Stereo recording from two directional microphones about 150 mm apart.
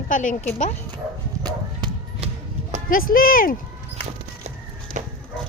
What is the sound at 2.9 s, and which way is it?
Speech, 70° left (ahead or behind).